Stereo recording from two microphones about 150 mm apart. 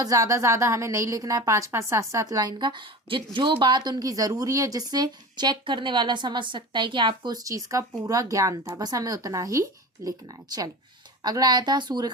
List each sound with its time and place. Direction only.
0.0 s speech: 25° right (ahead or behind)